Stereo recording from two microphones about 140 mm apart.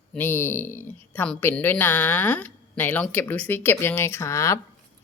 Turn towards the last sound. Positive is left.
turn(degrees=20)  # may be behind; listen again after turning